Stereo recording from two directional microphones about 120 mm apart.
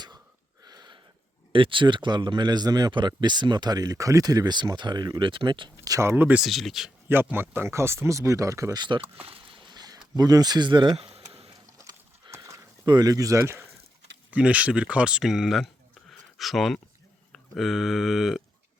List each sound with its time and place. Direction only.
0.6 s a sound: 35° right (ahead or behind)
1.5 s speech: 45° right (ahead or behind); by 6.4 s 15° right (ahead or behind)
6.4 s speech: centre (ahead or behind)
7.1 s speech: 15° right (ahead or behind)
8.8 s a sound: 45° right (ahead or behind)
10.2 s speech: 35° right (ahead or behind)
10.9 s a sound: 60° right (ahead or behind)
11.8 s horse: 30° right (ahead or behind)
12.8 s speech: 35° right (ahead or behind)
14.3 s speech: 10° right (ahead or behind)